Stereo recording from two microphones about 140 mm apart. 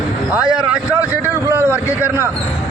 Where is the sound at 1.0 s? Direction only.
15° right (ahead or behind).